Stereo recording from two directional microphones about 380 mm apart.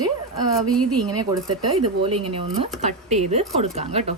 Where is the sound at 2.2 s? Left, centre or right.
Centre.